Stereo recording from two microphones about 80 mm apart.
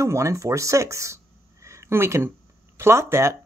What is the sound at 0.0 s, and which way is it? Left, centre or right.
Speech, right.